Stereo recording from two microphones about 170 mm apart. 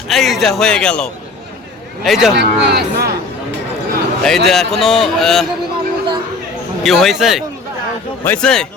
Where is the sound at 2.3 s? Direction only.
90° right.